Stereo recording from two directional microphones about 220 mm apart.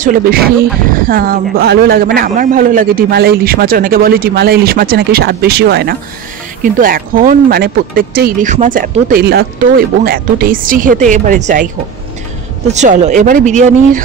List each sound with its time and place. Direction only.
0.0 s a man's voice: 40° right (ahead or behind)